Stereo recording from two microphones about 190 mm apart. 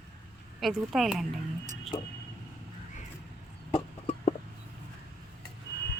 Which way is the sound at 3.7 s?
35° left (ahead or behind).